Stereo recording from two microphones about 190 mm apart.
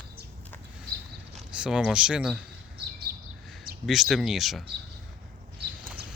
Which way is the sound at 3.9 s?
Centre (ahead or behind).